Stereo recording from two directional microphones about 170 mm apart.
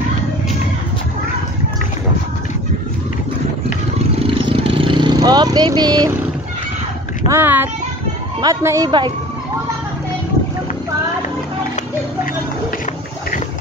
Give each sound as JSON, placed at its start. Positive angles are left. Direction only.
{"t": 4.3, "sound": "vehicle", "side_deg": -30}
{"t": 7.2, "sound": "a woman's voice", "side_deg": -15}